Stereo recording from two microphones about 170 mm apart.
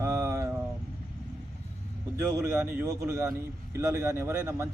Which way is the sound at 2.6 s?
20° right (ahead or behind).